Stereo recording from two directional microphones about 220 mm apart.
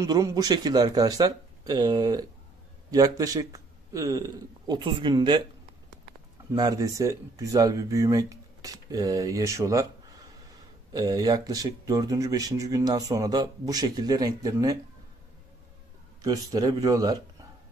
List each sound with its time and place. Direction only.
0.0 s a man's voice: 15° right (ahead or behind)
6.5 s speech: 15° right (ahead or behind)
10.9 s speech: 15° right (ahead or behind)
16.2 s speech: 15° right (ahead or behind)